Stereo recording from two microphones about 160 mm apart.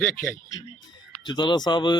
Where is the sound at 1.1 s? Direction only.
25° left (ahead or behind).